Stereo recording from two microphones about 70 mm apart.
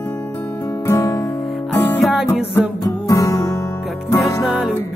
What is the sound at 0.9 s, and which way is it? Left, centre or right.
Guitar, left.